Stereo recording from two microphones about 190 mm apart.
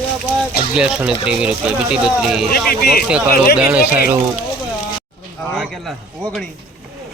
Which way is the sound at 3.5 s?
5° right (ahead or behind).